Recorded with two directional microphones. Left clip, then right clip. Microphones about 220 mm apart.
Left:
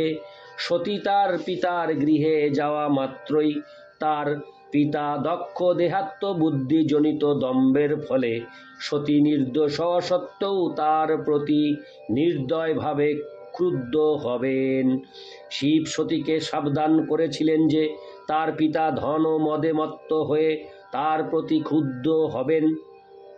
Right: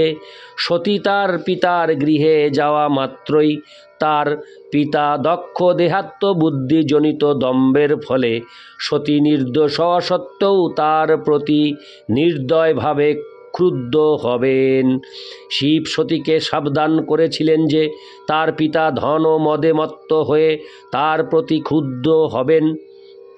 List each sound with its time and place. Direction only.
0.6 s speech: 50° right (ahead or behind)